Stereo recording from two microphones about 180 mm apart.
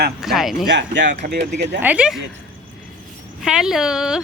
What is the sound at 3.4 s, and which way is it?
Speech, 5° right (ahead or behind).